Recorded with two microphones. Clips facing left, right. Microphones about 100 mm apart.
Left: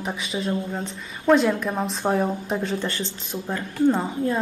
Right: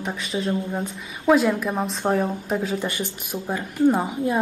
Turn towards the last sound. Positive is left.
turn(degrees=-15)  # may be behind; listen again after turning